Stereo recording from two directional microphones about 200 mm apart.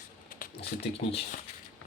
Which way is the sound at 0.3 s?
50° left (ahead or behind).